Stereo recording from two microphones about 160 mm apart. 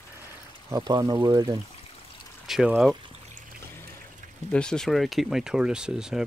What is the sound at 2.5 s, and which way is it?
Speech, 5° right (ahead or behind).